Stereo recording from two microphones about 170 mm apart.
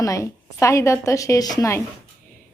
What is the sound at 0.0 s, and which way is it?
A woman's voice, 20° left (ahead or behind).